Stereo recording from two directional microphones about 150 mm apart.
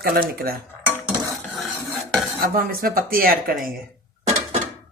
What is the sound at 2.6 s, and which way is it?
Speech, 75° right (ahead or behind).